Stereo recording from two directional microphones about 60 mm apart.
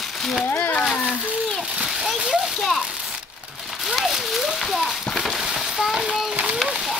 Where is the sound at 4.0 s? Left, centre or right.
Centre.